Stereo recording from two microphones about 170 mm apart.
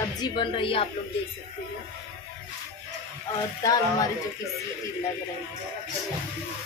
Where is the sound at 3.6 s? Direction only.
20° left (ahead or behind).